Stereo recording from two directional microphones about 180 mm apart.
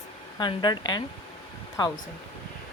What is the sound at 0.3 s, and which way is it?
Speech, 25° left (ahead or behind).